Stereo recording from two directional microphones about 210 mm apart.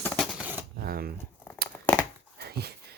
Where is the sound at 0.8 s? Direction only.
45° right (ahead or behind).